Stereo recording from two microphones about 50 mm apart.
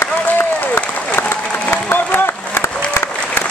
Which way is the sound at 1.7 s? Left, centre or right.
Left.